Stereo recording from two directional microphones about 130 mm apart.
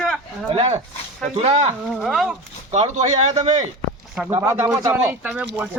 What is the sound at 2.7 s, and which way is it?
Speech, 65° right (ahead or behind).